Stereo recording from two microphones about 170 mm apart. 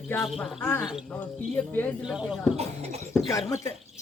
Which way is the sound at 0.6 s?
15° left (ahead or behind).